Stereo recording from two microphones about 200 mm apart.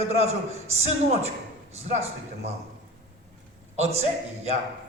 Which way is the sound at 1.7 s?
30° right (ahead or behind).